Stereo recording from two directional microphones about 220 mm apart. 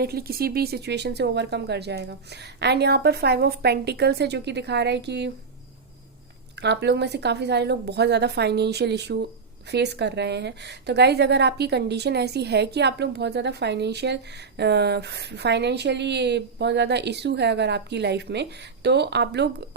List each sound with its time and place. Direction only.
0.0 s a woman's voice: 45° right (ahead or behind)
6.6 s a woman's voice: 50° right (ahead or behind)